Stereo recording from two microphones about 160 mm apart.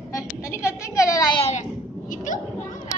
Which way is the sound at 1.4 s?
45° left (ahead or behind).